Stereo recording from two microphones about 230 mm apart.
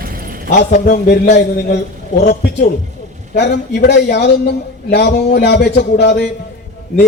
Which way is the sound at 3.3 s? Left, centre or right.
Left.